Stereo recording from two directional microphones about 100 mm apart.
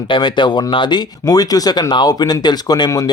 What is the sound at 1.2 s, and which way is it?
Speech, 40° left (ahead or behind).